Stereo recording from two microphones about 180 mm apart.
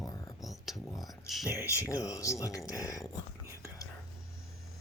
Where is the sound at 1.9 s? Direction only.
20° left (ahead or behind).